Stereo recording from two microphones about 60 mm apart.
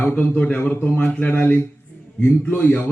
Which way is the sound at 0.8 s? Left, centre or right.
Left.